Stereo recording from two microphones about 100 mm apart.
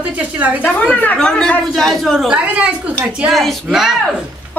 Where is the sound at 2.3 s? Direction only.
10° right (ahead or behind).